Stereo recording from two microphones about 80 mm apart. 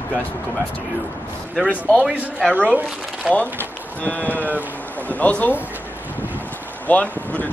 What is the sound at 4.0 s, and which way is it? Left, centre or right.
A man's voice, left.